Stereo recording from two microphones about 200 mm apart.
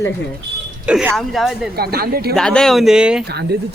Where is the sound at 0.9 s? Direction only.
5° right (ahead or behind).